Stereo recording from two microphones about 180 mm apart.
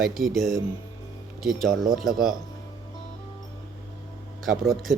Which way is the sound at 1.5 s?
50° right (ahead or behind).